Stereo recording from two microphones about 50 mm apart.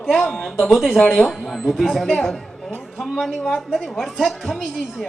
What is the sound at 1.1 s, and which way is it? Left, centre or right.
A woman's voice, centre.